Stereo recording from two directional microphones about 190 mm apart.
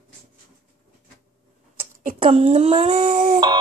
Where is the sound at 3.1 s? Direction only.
40° right (ahead or behind).